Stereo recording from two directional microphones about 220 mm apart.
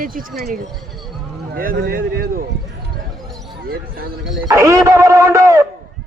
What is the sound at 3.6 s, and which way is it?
Speech, 45° right (ahead or behind).